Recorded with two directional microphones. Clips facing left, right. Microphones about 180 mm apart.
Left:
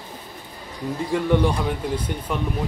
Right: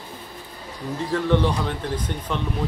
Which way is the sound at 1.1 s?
10° left (ahead or behind).